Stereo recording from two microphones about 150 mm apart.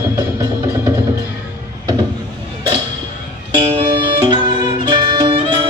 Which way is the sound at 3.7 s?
35° right (ahead or behind).